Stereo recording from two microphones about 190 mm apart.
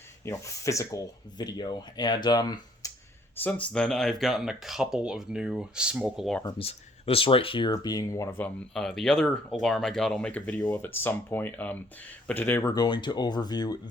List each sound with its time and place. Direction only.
0.3 s speech: 15° left (ahead or behind)
3.4 s speech: 5° left (ahead or behind)
6.4 s speech: 30° left (ahead or behind)